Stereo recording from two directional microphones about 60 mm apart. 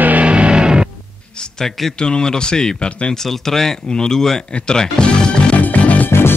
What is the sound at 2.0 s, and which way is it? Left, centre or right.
Speech, centre.